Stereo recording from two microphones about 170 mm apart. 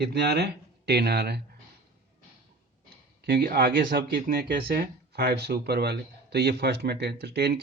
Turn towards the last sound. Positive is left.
turn(degrees=-70)  # may be behind; listen again after turning